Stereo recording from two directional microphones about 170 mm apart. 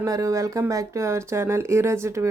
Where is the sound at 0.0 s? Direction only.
20° right (ahead or behind).